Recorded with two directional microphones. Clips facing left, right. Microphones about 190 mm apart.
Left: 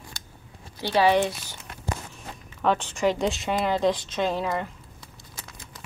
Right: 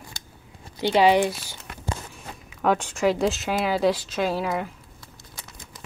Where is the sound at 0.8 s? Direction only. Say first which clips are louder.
Right 2 dB; 15° right (ahead or behind).